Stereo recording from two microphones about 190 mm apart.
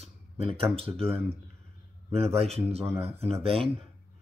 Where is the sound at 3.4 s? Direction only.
30° right (ahead or behind).